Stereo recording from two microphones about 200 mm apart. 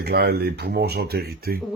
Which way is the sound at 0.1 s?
55° right (ahead or behind).